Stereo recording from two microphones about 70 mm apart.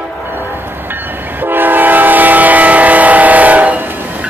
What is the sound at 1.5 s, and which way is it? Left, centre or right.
Train, right.